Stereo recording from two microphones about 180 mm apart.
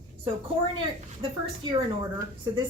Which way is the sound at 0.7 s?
25° right (ahead or behind).